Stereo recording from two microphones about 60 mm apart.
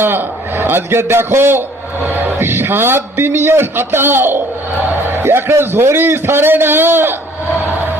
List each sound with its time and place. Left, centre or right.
0.0 s a man's voice: right